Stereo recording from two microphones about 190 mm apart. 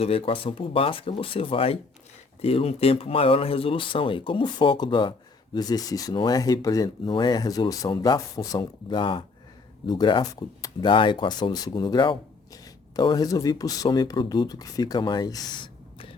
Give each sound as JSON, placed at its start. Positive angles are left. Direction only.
{"t": 0.0, "sound": "speech", "side_deg": 30}